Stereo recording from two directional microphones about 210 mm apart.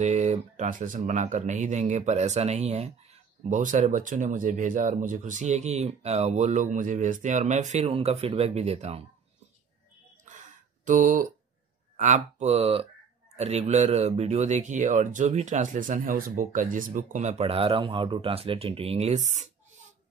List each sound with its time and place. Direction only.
0.0 s speech: 35° right (ahead or behind)
10.9 s speech: 40° right (ahead or behind)